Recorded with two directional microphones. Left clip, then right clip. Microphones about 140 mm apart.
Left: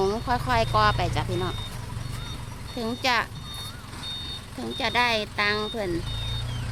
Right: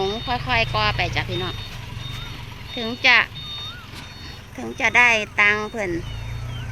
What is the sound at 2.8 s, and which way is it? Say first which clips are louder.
Speech: right 8 dB; centre (ahead or behind).